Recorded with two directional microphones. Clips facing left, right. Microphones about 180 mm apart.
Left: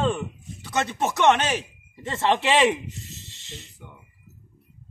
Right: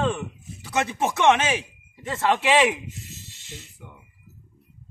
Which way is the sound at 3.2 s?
20° left (ahead or behind).